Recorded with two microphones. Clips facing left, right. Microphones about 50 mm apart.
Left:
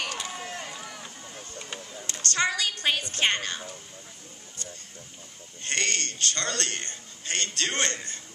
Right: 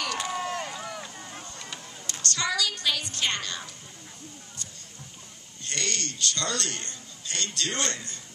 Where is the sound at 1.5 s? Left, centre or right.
Left.